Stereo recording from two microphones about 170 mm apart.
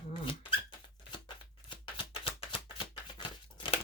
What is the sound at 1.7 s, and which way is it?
Shuffling cards, 30° left (ahead or behind).